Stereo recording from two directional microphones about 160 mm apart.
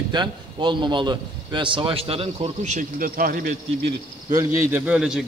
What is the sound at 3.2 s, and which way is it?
Speech, 65° right (ahead or behind).